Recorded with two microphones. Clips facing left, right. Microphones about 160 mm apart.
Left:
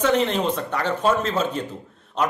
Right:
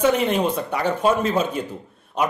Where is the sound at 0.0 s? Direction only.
10° right (ahead or behind).